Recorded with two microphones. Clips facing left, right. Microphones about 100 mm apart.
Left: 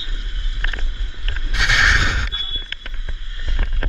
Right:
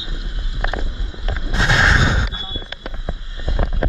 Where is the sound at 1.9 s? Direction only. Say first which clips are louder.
Right 3 dB; 15° right (ahead or behind).